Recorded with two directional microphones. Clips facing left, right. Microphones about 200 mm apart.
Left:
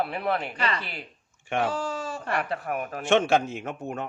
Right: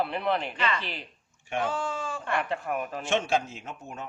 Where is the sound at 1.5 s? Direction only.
75° left (ahead or behind).